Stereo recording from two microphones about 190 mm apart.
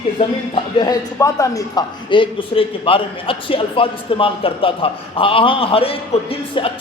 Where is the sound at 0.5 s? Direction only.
20° left (ahead or behind).